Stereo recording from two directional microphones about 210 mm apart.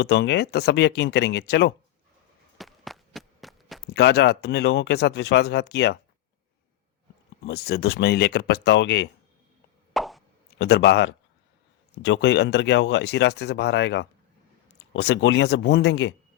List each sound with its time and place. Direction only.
0.0 s speech: 55° left (ahead or behind)
2.6 s a sound: centre (ahead or behind)
3.9 s speech: 50° left (ahead or behind)
7.4 s speech: 50° left (ahead or behind)
9.9 s plop: centre (ahead or behind)
10.6 s speech: 55° left (ahead or behind)